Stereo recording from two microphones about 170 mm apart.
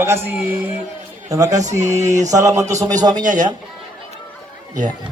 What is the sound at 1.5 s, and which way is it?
Speech, 45° right (ahead or behind).